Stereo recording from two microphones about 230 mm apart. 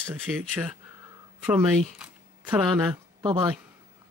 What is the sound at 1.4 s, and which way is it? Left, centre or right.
Speech, centre.